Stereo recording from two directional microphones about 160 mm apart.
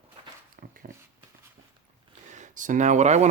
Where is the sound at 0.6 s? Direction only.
60° right (ahead or behind).